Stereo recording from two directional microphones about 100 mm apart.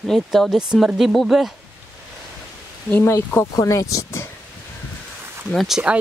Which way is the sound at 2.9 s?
25° left (ahead or behind).